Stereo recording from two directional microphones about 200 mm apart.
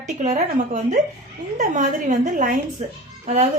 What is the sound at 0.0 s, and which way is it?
A woman's voice, 35° right (ahead or behind).